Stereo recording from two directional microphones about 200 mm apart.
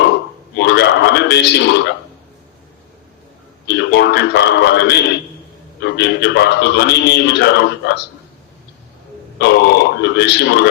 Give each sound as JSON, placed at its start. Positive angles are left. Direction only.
{"t": 0.5, "sound": "a man's voice", "side_deg": 55}
{"t": 3.7, "sound": "a man's voice", "side_deg": 60}
{"t": 9.4, "sound": "a man's voice", "side_deg": 60}